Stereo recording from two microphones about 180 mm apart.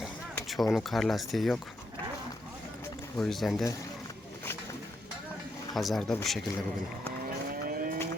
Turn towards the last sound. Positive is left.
turn(degrees=-50)  # may be behind; listen again after turning